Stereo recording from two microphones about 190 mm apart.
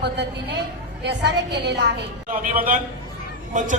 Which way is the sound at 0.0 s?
65° right (ahead or behind).